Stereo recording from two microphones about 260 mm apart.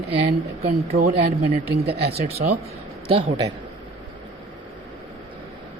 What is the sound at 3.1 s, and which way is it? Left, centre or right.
Speech, centre.